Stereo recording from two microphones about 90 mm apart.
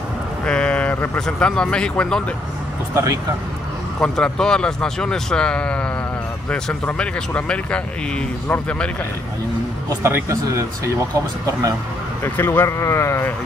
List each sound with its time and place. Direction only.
0.5 s speech: 10° left (ahead or behind)
2.9 s speech: 40° right (ahead or behind)
4.0 s speech: 10° left (ahead or behind)
10.0 s speech: 35° right (ahead or behind)
12.2 s speech: 25° left (ahead or behind)